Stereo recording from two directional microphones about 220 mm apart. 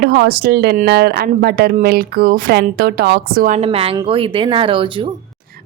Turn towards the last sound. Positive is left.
turn(degrees=-25)  # may be behind; listen again after turning